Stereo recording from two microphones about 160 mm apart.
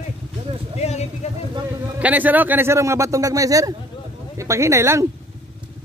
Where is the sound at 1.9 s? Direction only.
10° right (ahead or behind).